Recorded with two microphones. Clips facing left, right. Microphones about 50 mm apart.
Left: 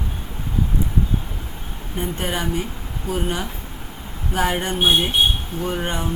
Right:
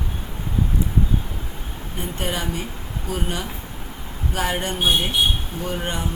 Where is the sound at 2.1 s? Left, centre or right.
Left.